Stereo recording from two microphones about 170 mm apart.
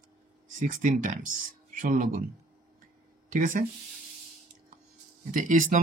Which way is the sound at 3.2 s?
50° right (ahead or behind).